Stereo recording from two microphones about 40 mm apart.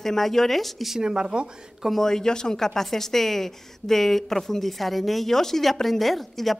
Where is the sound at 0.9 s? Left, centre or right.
Centre.